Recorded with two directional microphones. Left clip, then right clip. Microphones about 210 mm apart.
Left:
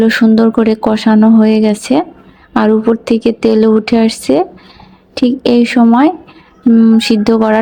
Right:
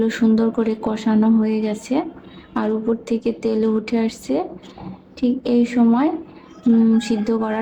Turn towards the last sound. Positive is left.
turn(degrees=40)  # may be behind; listen again after turning